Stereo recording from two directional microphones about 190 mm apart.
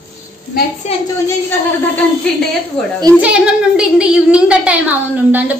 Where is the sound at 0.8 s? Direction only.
35° left (ahead or behind).